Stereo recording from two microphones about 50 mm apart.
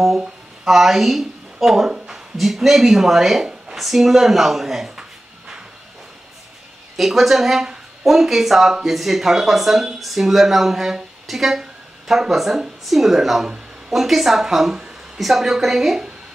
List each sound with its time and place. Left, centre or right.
0.7 s speech: centre
1.9 s a sound: centre
2.3 s speech: centre
7.0 s speech: centre